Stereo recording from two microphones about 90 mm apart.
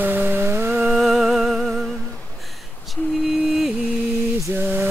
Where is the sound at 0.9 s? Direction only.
Centre (ahead or behind).